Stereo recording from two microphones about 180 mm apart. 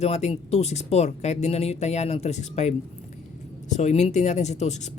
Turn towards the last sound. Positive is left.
turn(degrees=40)  # may be behind; listen again after turning